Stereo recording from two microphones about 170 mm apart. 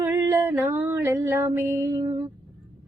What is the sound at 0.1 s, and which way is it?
Music, 15° right (ahead or behind).